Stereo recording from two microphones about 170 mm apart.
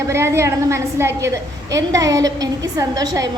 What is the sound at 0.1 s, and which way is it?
A woman's voice, 15° right (ahead or behind).